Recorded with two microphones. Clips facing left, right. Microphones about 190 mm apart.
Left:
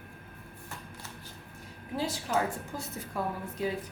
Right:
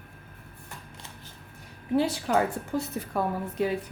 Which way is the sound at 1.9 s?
65° right (ahead or behind).